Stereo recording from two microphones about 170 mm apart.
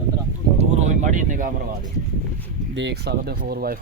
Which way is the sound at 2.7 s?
85° right.